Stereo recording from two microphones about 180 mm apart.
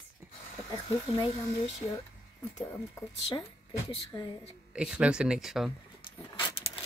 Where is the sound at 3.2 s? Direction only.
30° left (ahead or behind).